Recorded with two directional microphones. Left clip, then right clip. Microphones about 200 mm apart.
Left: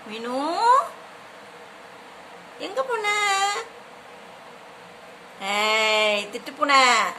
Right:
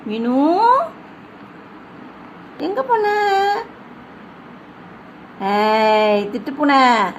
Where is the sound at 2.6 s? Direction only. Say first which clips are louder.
Right 8 dB; 10° left (ahead or behind).